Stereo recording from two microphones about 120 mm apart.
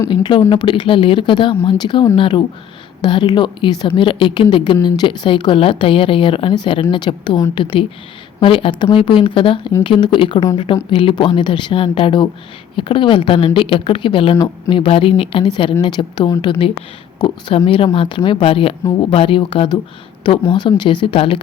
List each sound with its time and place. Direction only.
0.1 s a woman's voice: 40° left (ahead or behind)